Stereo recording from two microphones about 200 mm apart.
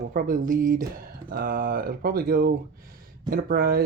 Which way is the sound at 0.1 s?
45° right (ahead or behind).